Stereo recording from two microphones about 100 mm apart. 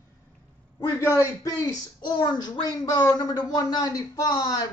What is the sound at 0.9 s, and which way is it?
A man's voice, 30° left (ahead or behind).